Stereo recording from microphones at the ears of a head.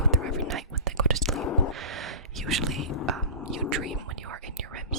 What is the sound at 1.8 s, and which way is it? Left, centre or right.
Gasp, right.